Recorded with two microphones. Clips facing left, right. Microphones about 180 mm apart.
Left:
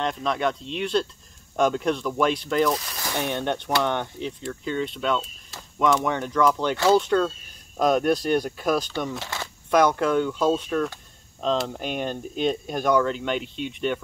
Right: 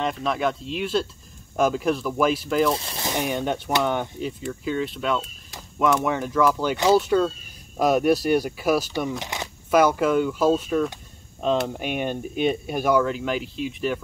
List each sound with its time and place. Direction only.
0.0 s speech: 5° right (ahead or behind)
2.7 s speech: 30° right (ahead or behind)
3.2 s speech: 5° right (ahead or behind)
9.7 s speech: 5° right (ahead or behind)